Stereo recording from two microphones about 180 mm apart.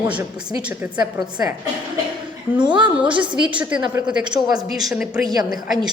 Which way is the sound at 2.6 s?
25° right (ahead or behind).